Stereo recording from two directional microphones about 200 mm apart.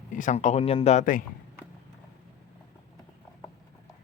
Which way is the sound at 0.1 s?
40° left (ahead or behind).